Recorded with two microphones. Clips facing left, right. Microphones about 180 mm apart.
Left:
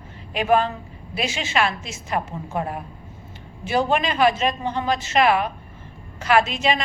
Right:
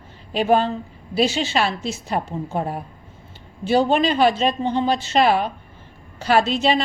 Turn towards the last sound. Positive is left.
turn(degrees=-35)  # may be behind; listen again after turning